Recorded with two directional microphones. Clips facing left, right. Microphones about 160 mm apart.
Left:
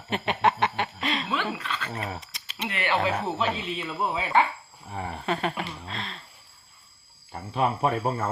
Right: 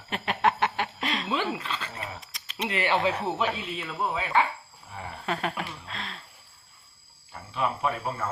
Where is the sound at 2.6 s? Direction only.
30° right (ahead or behind).